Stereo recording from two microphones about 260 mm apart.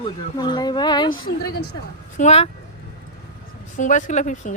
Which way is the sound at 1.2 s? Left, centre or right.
Left.